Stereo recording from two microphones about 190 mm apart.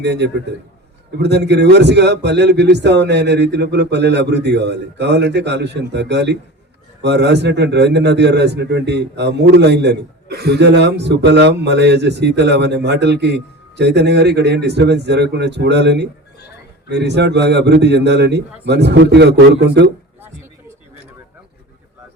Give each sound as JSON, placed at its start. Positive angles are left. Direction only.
{"t": 0.0, "sound": "a man's voice", "side_deg": -65}